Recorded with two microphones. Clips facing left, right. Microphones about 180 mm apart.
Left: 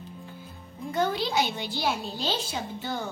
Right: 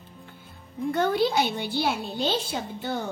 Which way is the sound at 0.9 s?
55° right (ahead or behind).